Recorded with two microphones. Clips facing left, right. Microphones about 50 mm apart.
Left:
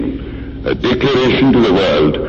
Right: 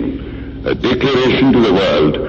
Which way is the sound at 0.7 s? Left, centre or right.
Centre.